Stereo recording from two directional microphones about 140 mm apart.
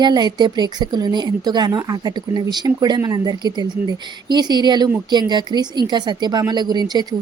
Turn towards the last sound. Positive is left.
turn(degrees=-30)  # may be behind; listen again after turning